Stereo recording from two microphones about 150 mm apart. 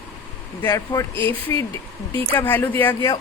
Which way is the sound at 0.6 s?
20° left (ahead or behind).